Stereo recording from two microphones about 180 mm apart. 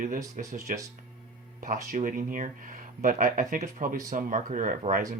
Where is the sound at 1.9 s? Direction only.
45° right (ahead or behind).